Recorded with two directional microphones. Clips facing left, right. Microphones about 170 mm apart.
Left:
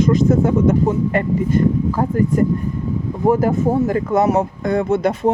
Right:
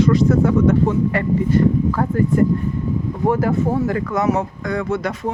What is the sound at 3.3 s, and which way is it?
Speech, 20° left (ahead or behind).